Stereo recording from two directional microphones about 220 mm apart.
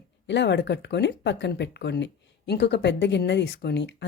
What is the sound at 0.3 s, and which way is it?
Speech, 55° left (ahead or behind).